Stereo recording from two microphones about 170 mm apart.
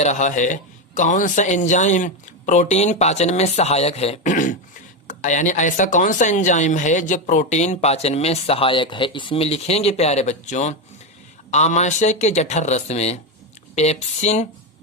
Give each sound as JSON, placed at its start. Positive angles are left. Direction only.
{"t": 0.0, "sound": "speech", "side_deg": 45}